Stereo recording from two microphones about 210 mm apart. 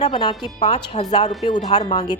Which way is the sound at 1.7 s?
20° left (ahead or behind).